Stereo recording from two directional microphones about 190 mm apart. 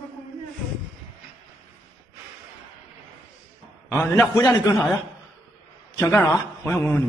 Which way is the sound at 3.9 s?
10° left (ahead or behind).